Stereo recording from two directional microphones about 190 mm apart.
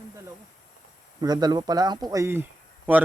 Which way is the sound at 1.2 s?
20° right (ahead or behind).